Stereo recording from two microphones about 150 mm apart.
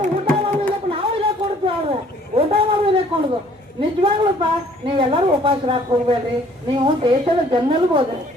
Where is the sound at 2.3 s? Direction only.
40° right (ahead or behind).